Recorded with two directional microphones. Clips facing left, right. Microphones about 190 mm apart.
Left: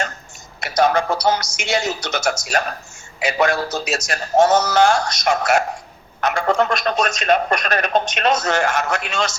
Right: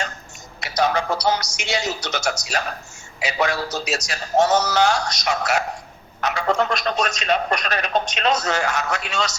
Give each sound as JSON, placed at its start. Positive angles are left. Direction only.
{"t": 0.6, "sound": "a man's voice", "side_deg": 50}